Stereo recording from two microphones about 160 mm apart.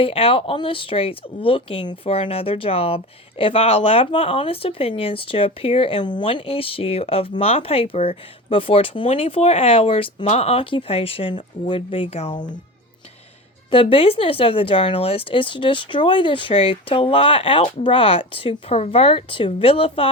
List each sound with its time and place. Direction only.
0.0 s speech: 35° left (ahead or behind)
13.9 s speech: 35° left (ahead or behind)